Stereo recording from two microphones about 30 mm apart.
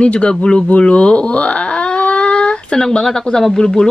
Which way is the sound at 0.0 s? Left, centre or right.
Left.